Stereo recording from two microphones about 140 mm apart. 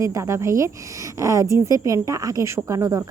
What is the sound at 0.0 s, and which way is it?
A woman's voice, 20° right (ahead or behind).